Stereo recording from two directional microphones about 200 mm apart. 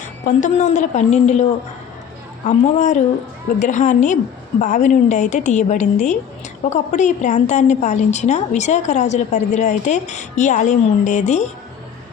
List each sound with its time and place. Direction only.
0.3 s a woman's voice: 40° left (ahead or behind)
2.5 s a woman's voice: 35° left (ahead or behind)